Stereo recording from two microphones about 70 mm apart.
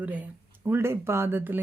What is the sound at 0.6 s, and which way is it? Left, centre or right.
Mantra, right.